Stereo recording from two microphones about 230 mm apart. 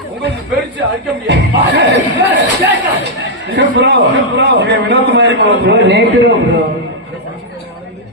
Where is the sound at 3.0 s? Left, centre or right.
Right.